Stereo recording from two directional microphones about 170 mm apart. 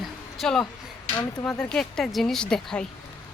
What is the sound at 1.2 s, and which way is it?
Speech, 20° left (ahead or behind).